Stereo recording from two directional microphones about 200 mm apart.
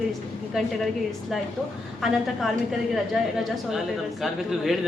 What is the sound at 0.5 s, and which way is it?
Speech, centre (ahead or behind).